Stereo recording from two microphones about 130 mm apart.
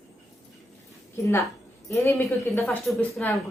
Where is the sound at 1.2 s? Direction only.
25° left (ahead or behind).